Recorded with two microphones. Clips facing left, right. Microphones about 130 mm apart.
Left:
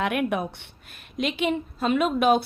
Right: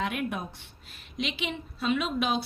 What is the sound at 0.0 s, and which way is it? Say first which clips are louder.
Speech: left 6 dB; 65° left (ahead or behind).